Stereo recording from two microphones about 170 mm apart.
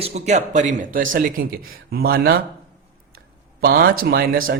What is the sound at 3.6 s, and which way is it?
Speech, 60° right (ahead or behind).